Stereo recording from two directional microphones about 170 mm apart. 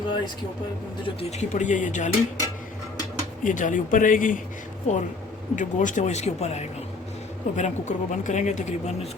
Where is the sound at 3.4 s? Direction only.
50° left (ahead or behind).